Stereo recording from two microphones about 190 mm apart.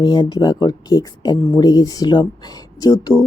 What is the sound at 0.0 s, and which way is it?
Speech, 20° left (ahead or behind).